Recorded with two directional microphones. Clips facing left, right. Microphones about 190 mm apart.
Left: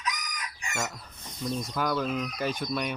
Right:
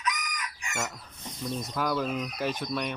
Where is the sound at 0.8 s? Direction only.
Centre (ahead or behind).